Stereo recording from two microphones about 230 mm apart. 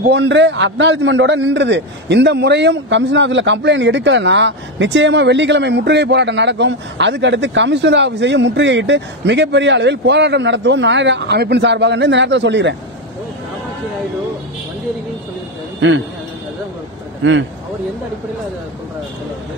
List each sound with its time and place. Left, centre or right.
0.0 s a man's voice: right
17.2 s speech: right